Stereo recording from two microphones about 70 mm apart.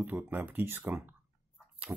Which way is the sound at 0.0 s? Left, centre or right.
Right.